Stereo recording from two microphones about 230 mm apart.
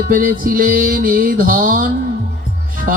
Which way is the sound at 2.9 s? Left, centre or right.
Right.